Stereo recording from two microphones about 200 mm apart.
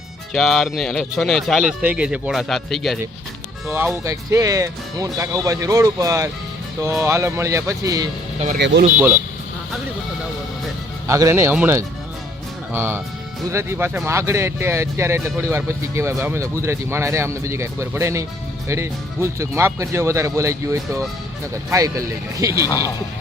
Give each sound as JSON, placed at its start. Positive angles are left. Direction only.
{"t": 0.3, "sound": "speech", "side_deg": 0}
{"t": 3.7, "sound": "speech", "side_deg": -10}
{"t": 8.5, "sound": "speech", "side_deg": -55}
{"t": 11.0, "sound": "speech", "side_deg": -15}